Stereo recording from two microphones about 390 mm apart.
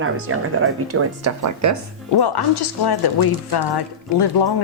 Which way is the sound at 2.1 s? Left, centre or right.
Left.